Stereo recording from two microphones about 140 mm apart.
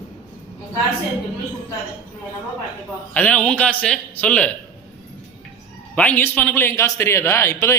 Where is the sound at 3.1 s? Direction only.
10° left (ahead or behind).